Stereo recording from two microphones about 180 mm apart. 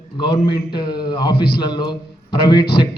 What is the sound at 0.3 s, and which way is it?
Speech, 60° left (ahead or behind).